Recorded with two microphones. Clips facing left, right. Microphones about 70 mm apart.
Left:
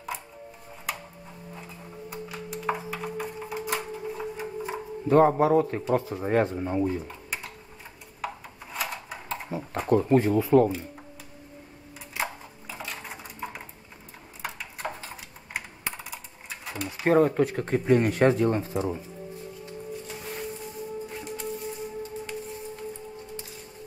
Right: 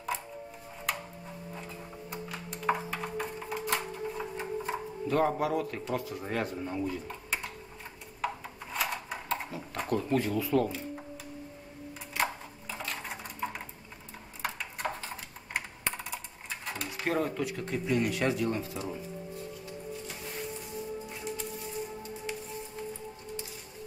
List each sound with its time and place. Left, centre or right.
2.0 s typing: centre
5.0 s speech: left
7.1 s typing: centre
8.7 s a sound: centre
9.8 s speech: left
12.1 s dishes: centre
14.4 s typing: centre
17.0 s speech: left